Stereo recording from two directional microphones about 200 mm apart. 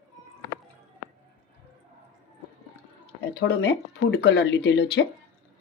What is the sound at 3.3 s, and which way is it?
Speech, 55° left (ahead or behind).